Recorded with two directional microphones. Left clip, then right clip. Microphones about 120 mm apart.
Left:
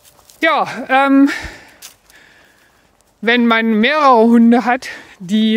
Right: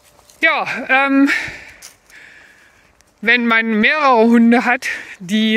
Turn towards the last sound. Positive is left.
turn(degrees=45)  # may be behind; listen again after turning